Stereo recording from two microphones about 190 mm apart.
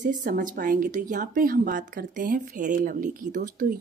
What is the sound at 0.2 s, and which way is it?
Speech, 50° right (ahead or behind).